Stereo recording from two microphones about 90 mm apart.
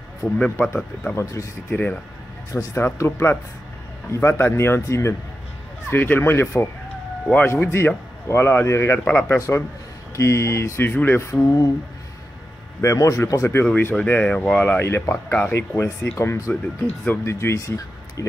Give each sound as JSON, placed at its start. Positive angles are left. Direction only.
{"t": 0.4, "sound": "speech", "side_deg": 15}
{"t": 1.1, "sound": "speech", "side_deg": 35}
{"t": 1.7, "sound": "a man's voice", "side_deg": 20}
{"t": 2.5, "sound": "a man's voice", "side_deg": 35}
{"t": 5.9, "sound": "a man's voice", "side_deg": 20}
{"t": 10.9, "sound": "a man's voice", "side_deg": 20}
{"t": 11.4, "sound": "speech", "side_deg": 40}
{"t": 12.8, "sound": "speech", "side_deg": 35}
{"t": 13.7, "sound": "a man's voice", "side_deg": 20}
{"t": 16.8, "sound": "speech", "side_deg": 15}
{"t": 17.2, "sound": "speech", "side_deg": 30}